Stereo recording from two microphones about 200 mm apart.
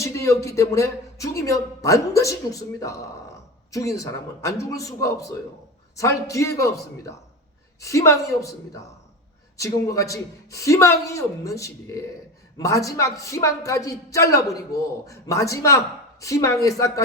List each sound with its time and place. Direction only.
0.0 s a man's voice: 15° left (ahead or behind)